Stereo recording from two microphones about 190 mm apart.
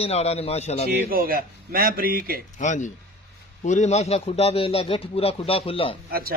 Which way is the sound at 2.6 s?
40° left (ahead or behind).